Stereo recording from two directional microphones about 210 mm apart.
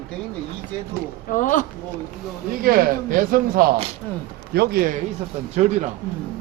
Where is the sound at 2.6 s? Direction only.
45° right (ahead or behind).